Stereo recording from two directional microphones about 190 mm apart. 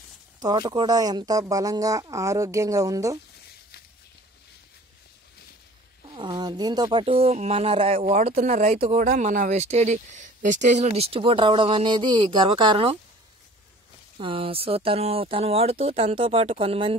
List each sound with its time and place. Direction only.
0.4 s speech: 25° right (ahead or behind)
6.0 s speech: 25° right (ahead or behind)
9.0 s speech: 45° right (ahead or behind); by 12.9 s 25° right (ahead or behind)
14.1 s speech: 30° right (ahead or behind)